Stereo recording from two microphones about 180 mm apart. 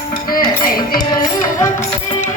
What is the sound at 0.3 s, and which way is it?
Music, 55° left (ahead or behind).